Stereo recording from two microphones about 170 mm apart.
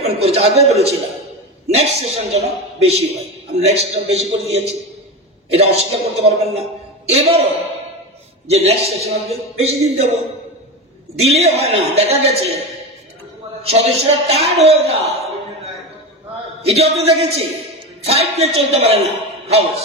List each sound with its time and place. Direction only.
0.0 s a man's voice: 40° right (ahead or behind)
8.5 s a man's voice: 35° right (ahead or behind)